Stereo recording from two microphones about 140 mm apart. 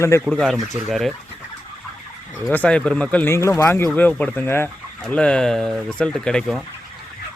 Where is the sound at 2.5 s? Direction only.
10° left (ahead or behind).